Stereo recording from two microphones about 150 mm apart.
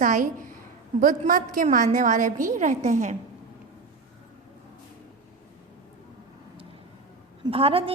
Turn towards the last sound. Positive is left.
turn(degrees=-40)  # may be behind; listen again after turning